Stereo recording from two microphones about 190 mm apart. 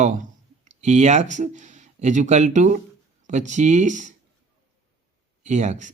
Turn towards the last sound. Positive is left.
turn(degrees=-40)  # may be behind; listen again after turning